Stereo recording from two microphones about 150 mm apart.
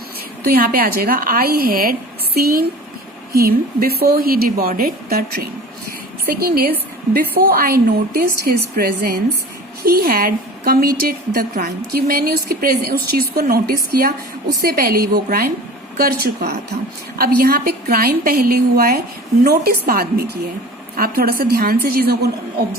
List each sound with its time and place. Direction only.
0.4 s a woman's voice: 75° right (ahead or behind)
3.3 s a woman's voice: 90° right
9.8 s a woman's voice: 80° right
13.9 s a woman's voice: 80° right
19.5 s a woman's voice: 90° right